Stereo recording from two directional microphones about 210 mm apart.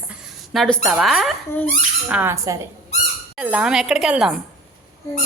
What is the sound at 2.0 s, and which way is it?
A woman's voice, 10° right (ahead or behind).